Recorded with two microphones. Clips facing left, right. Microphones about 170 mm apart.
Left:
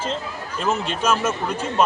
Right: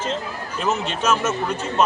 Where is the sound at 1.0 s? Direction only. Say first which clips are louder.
Right 1 dB; 10° left (ahead or behind).